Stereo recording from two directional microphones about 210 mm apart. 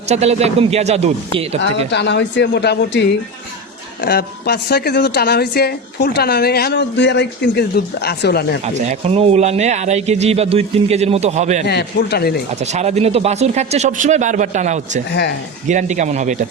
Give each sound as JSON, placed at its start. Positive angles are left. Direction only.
{"t": 0.1, "sound": "speech", "side_deg": -30}
{"t": 1.6, "sound": "a woman's voice", "side_deg": 55}
{"t": 8.6, "sound": "speech", "side_deg": -30}
{"t": 11.6, "sound": "a woman's voice", "side_deg": 50}
{"t": 12.7, "sound": "speech", "side_deg": -30}